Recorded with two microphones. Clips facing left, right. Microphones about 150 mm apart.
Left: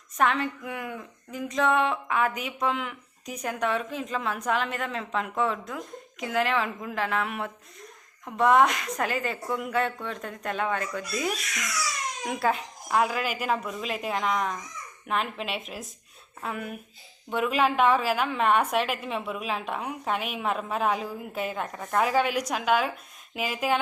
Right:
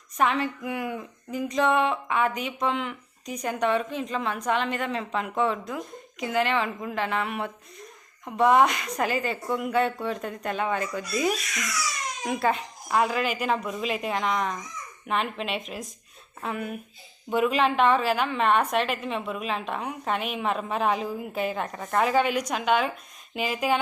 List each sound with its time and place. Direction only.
0.2 s speech: centre (ahead or behind)